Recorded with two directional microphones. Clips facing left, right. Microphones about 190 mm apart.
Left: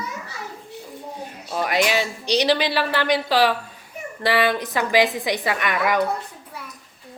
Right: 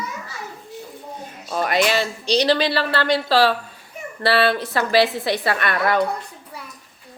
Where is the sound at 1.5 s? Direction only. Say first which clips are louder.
Right 1 dB; 10° left (ahead or behind).